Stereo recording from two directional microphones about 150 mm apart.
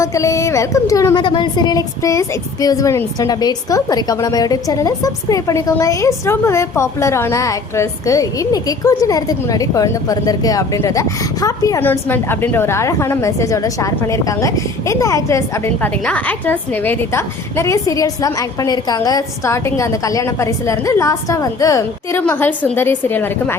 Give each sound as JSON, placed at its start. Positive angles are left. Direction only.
{"t": 0.0, "sound": "a woman's voice", "side_deg": 20}